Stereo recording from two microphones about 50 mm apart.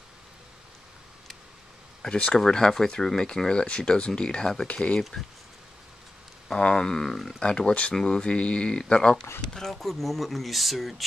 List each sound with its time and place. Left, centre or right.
2.0 s speech: centre
6.5 s speech: centre